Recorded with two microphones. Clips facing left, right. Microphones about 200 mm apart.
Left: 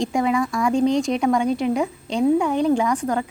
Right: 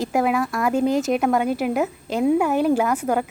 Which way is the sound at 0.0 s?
5° right (ahead or behind).